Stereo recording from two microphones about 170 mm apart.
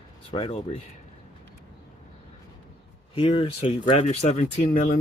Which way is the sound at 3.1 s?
30° left (ahead or behind).